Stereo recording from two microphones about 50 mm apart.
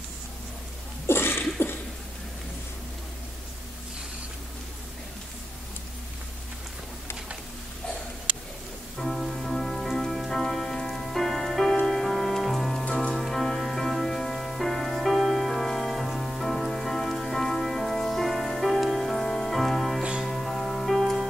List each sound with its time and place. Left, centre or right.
1.0 s a sound: left
8.9 s music: centre
20.0 s music: centre
20.2 s music: centre